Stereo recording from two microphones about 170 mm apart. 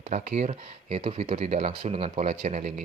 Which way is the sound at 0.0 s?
40° right (ahead or behind).